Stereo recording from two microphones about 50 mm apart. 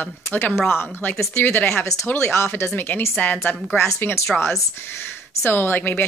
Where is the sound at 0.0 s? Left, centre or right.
Left.